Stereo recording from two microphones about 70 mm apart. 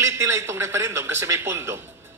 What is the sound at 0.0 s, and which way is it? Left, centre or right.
A man's voice, right.